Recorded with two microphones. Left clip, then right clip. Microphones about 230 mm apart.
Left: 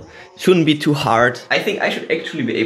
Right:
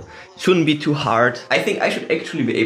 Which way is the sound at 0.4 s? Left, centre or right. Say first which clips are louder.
Left 2 dB; centre.